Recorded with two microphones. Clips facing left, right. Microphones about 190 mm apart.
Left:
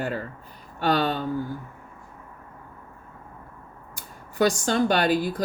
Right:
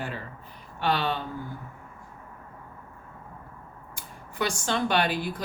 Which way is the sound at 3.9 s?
40° left (ahead or behind).